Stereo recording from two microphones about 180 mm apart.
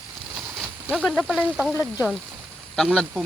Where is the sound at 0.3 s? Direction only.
5° right (ahead or behind).